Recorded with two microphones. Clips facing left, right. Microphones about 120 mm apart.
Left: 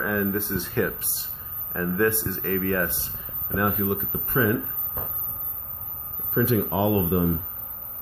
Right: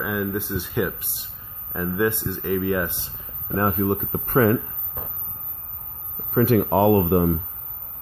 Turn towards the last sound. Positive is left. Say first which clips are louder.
# right 5 dB
turn(degrees=-50)  # may be behind; listen again after turning